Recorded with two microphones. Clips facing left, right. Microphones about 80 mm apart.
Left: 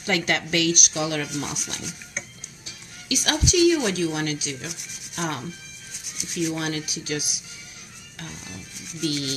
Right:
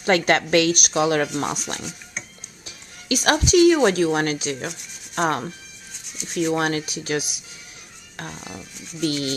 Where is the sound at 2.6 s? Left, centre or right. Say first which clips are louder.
Right 1 dB; right.